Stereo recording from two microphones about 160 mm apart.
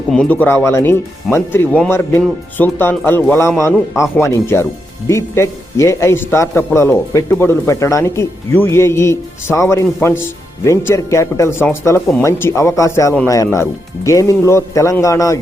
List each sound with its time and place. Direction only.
0.1 s a man's voice: 5° left (ahead or behind)